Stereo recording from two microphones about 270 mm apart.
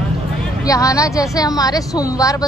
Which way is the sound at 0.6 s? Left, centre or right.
Centre.